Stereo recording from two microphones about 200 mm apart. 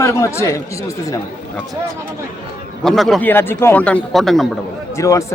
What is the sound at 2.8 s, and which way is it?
A man's voice, centre (ahead or behind).